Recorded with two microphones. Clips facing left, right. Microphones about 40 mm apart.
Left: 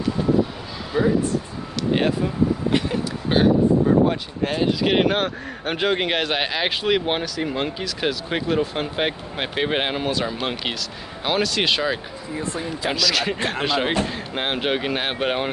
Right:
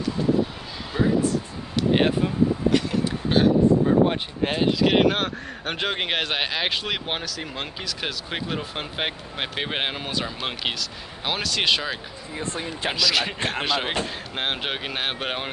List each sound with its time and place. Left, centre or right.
0.9 s speech: centre
1.9 s speech: centre
2.9 s a sound: centre
4.1 s speech: right
4.7 s speech: centre
12.4 s speech: right
12.9 s speech: centre